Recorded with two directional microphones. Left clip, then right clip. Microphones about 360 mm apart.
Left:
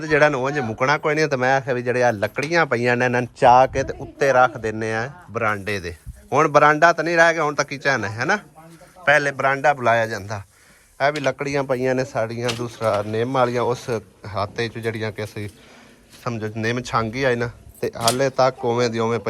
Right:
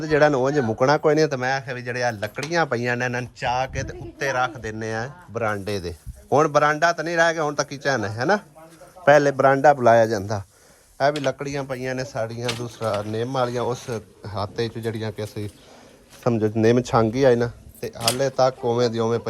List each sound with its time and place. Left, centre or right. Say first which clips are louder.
0.0 s a man's voice: left 1 dB; centre